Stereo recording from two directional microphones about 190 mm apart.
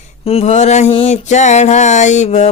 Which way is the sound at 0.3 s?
30° left (ahead or behind).